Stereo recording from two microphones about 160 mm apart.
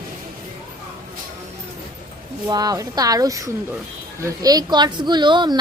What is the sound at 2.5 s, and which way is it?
A woman's voice, 25° right (ahead or behind).